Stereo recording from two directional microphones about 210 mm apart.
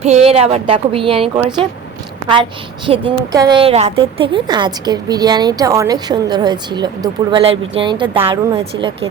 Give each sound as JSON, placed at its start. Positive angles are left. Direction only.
{"t": 0.0, "sound": "a woman's voice", "side_deg": -30}